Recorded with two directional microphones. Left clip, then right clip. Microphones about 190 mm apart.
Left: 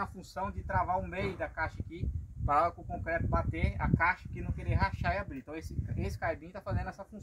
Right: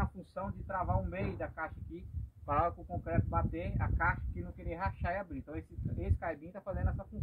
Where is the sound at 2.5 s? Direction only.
5° right (ahead or behind).